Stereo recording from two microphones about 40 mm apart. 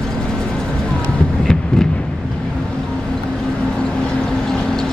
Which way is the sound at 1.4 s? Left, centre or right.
Centre.